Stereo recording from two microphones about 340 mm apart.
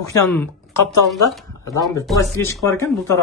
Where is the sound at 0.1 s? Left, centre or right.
Centre.